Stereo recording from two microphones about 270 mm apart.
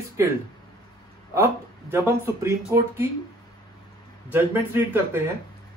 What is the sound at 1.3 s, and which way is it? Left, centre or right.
Speech, centre.